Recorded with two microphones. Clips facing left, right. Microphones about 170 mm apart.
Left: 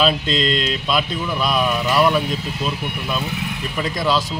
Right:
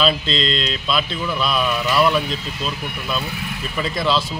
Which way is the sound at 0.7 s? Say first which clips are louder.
Left 2 dB; 15° left (ahead or behind).